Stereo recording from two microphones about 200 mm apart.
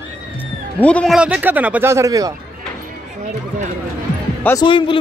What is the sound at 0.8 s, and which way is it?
Speech, 5° left (ahead or behind).